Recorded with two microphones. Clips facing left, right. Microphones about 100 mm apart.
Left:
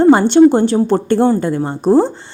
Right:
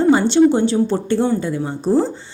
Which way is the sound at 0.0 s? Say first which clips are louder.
Left 5 dB; 55° left (ahead or behind).